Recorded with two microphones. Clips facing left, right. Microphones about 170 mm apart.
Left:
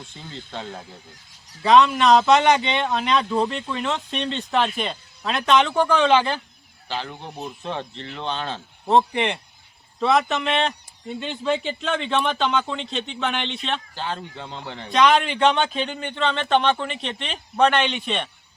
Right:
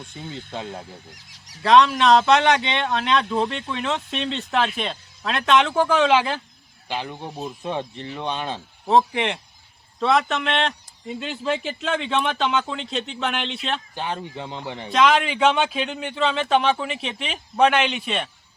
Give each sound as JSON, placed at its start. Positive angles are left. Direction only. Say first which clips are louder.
{"t": 0.5, "sound": "speech", "louder": "right 1 dB", "side_deg": -10}
{"t": 1.6, "sound": "speech", "louder": "even", "side_deg": 0}
{"t": 6.8, "sound": "speech", "louder": "right 1 dB", "side_deg": -15}
{"t": 8.9, "sound": "speech", "louder": "even", "side_deg": 0}
{"t": 13.9, "sound": "speech", "louder": "right 1 dB", "side_deg": -15}
{"t": 14.8, "sound": "speech", "louder": "left 1 dB", "side_deg": 0}